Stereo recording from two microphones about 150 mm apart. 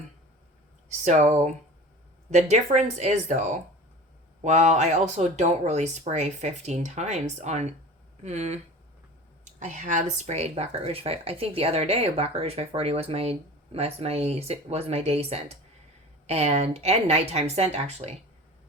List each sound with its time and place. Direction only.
0.9 s speech: 55° right (ahead or behind)